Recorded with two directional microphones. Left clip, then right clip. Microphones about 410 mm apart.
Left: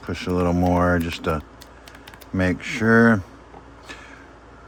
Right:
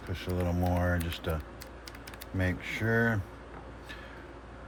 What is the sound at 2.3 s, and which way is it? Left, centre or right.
Speech, centre.